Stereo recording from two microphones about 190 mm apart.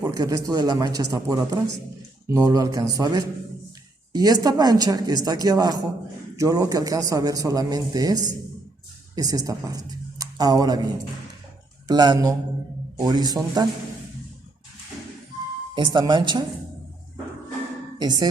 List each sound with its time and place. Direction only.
0.0 s a man's voice: 20° right (ahead or behind)
11.9 s a man's voice: 20° right (ahead or behind)
15.7 s a man's voice: 25° right (ahead or behind)
18.0 s a man's voice: 20° right (ahead or behind)